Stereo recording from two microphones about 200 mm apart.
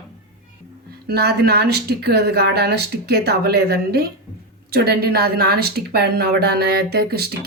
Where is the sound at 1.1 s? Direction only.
55° right (ahead or behind).